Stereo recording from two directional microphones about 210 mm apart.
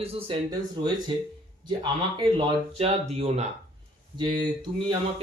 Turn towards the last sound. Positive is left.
turn(degrees=-20)  # may be behind; listen again after turning